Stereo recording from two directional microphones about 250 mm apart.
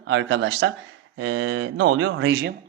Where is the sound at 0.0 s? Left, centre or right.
Right.